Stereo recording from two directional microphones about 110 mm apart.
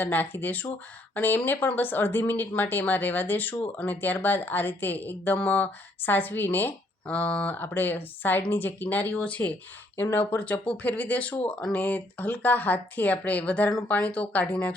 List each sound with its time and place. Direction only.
0.0 s speech: 15° left (ahead or behind)